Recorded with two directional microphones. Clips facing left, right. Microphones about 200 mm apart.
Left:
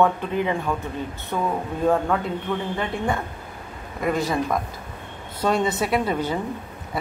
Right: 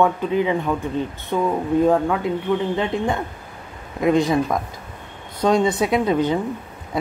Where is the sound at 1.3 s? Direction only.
15° right (ahead or behind).